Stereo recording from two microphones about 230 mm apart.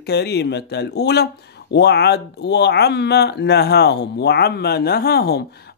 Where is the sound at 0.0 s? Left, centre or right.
Left.